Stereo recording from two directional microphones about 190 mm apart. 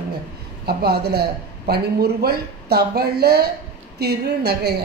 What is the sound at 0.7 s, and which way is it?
A woman's voice, 55° right (ahead or behind).